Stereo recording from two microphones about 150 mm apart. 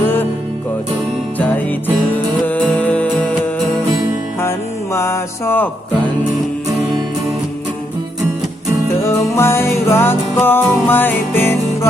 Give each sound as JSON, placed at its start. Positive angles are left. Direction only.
{"t": 0.0, "sound": "music", "side_deg": 15}
{"t": 1.4, "sound": "music", "side_deg": 10}
{"t": 4.9, "sound": "music", "side_deg": 15}
{"t": 9.0, "sound": "music", "side_deg": 15}